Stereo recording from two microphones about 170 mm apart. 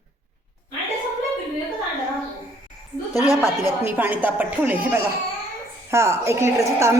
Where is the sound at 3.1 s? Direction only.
20° left (ahead or behind).